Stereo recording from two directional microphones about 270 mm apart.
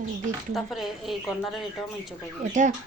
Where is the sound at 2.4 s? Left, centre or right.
Right.